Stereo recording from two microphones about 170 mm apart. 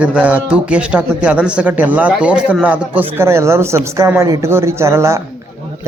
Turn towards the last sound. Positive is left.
turn(degrees=-15)  # may be behind; listen again after turning